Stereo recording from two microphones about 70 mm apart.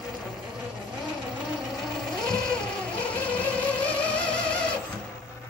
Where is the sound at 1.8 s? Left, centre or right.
Centre.